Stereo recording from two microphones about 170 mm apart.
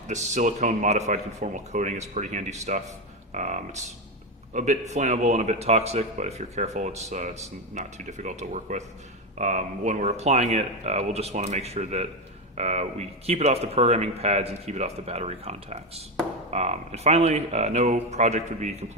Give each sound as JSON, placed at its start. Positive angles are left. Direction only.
{"t": 0.1, "sound": "speech", "side_deg": -45}